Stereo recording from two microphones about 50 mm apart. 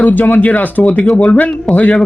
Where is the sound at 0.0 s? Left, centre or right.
Left.